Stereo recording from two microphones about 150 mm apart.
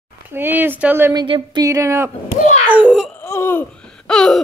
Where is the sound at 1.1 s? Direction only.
30° right (ahead or behind).